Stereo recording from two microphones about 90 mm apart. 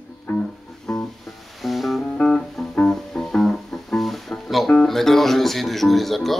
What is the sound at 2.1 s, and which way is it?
Music, 10° left (ahead or behind).